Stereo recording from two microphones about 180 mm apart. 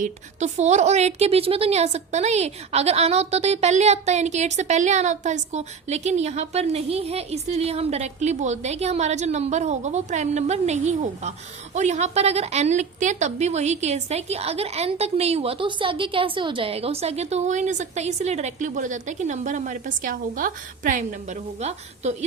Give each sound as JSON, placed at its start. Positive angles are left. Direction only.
{"t": 0.0, "sound": "a woman's voice", "side_deg": -40}